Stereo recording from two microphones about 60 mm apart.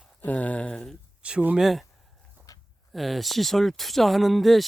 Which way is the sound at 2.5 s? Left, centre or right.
Left.